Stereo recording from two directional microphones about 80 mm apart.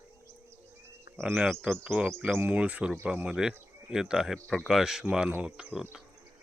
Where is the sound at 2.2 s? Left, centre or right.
Right.